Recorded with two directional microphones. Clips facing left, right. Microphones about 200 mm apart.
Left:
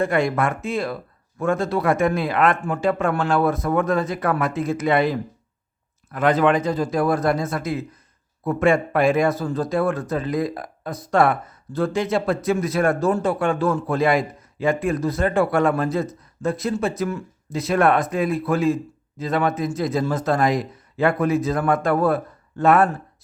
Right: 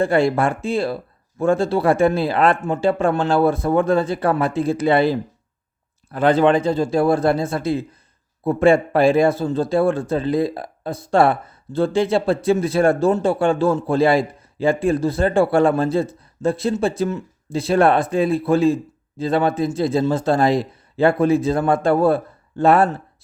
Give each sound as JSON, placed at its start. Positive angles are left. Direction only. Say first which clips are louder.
{"t": 0.0, "sound": "speech", "louder": "right 3 dB", "side_deg": -30}